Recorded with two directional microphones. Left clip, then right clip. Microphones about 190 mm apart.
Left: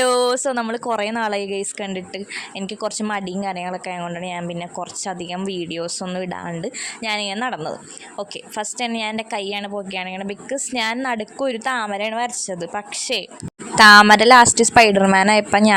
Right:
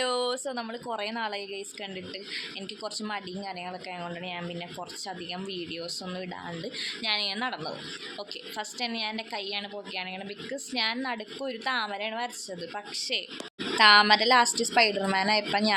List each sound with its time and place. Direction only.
0.0 s a woman's voice: 50° left (ahead or behind)